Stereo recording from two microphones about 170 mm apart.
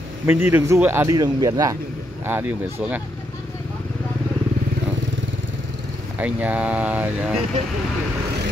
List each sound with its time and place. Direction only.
0.3 s a man's voice: 15° right (ahead or behind)
2.2 s a man's voice: 10° right (ahead or behind)
6.1 s a man's voice: 10° right (ahead or behind)